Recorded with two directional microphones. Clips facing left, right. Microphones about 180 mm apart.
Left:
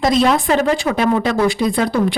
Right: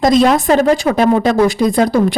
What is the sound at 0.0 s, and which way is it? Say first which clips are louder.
A woman's voice: right 4 dB; 45° right (ahead or behind).